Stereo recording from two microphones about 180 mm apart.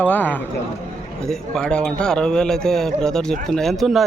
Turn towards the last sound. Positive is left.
turn(degrees=0)  # may be behind; listen again after turning